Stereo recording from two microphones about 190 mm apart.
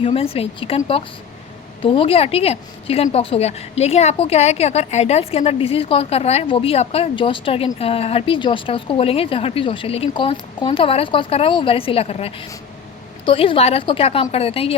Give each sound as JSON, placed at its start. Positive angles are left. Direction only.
{"t": 0.0, "sound": "a woman's voice", "side_deg": 30}